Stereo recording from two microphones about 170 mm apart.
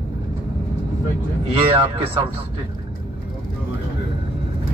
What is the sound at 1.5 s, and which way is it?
Speech, 30° right (ahead or behind).